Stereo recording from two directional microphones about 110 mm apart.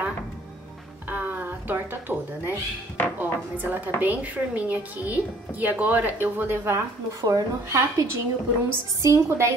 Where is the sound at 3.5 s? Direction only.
15° right (ahead or behind).